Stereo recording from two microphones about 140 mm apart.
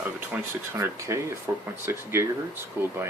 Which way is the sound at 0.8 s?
20° right (ahead or behind).